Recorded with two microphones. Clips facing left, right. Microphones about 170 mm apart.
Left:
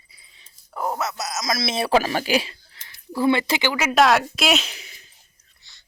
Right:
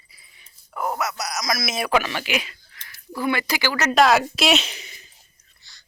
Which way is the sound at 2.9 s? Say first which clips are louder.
Left 5 dB; 25° left (ahead or behind).